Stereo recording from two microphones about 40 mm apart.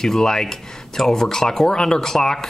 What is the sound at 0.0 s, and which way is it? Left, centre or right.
Speech, centre.